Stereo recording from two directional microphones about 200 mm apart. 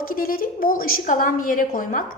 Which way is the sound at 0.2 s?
45° left (ahead or behind).